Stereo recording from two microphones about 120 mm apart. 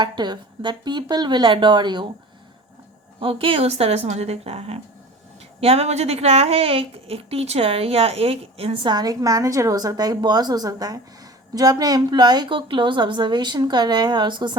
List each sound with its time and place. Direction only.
0.0 s a woman's voice: 40° right (ahead or behind)
3.2 s a woman's voice: 50° right (ahead or behind)